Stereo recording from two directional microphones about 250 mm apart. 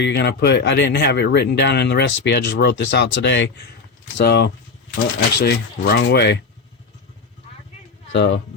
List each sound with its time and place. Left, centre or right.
0.0 s speech: left
8.1 s speech: left